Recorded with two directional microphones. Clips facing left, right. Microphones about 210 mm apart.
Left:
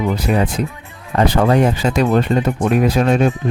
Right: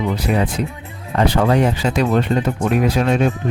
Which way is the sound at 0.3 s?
45° left (ahead or behind).